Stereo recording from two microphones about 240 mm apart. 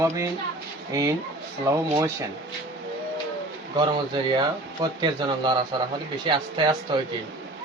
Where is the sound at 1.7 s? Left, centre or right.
Centre.